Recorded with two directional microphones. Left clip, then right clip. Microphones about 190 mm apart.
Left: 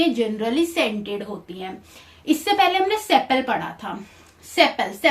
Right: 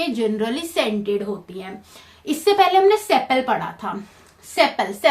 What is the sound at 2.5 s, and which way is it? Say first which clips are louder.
Speech: right 5 dB; 35° right (ahead or behind).